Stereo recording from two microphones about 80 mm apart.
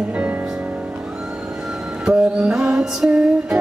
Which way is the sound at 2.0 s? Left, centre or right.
Centre.